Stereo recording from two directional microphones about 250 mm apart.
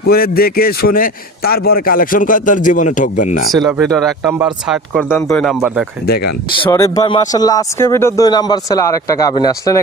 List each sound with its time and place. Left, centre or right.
0.0 s a man's voice: left
3.8 s speech: centre
4.3 s speech: centre
6.6 s speech: centre